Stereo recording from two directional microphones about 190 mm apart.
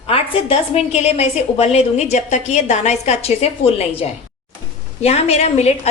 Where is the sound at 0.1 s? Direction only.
30° left (ahead or behind).